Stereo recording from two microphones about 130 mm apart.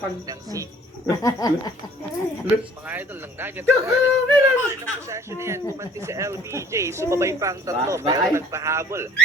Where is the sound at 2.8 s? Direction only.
15° right (ahead or behind); by 8.3 s 30° right (ahead or behind).